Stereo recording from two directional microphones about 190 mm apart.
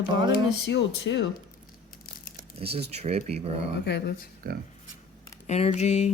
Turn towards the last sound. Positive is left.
turn(degrees=35)  # may be behind; listen again after turning